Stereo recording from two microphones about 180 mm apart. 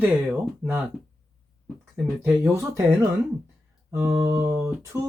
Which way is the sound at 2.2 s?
15° right (ahead or behind).